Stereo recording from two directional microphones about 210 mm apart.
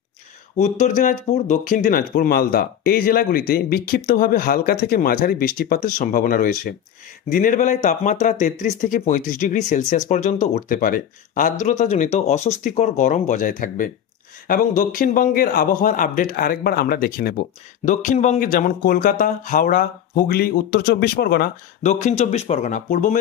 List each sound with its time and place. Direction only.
0.6 s a man's voice: 35° left (ahead or behind)
21.8 s speech: 35° left (ahead or behind)